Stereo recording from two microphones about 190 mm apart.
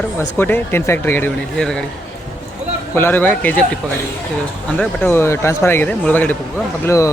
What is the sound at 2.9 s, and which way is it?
Speech, 10° left (ahead or behind).